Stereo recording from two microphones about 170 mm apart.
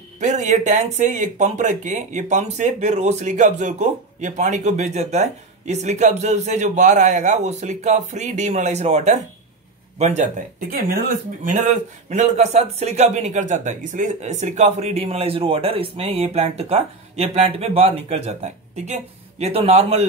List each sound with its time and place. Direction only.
0.2 s speech: 45° right (ahead or behind)